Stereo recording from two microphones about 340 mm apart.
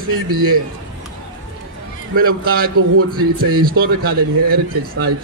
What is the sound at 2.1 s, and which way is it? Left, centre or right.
A man's voice, right.